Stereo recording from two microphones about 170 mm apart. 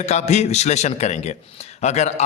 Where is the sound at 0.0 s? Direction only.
40° left (ahead or behind).